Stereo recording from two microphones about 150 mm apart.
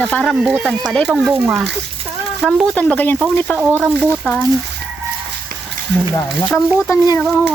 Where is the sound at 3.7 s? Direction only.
10° right (ahead or behind).